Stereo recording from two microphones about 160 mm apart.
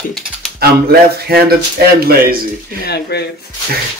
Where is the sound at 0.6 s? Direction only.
75° right (ahead or behind).